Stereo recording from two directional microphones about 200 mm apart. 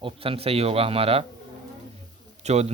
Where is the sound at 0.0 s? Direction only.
30° right (ahead or behind).